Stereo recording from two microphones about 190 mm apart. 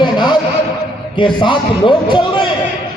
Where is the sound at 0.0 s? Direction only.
25° left (ahead or behind).